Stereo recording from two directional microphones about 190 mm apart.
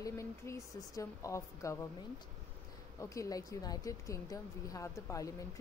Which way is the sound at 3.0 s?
15° left (ahead or behind).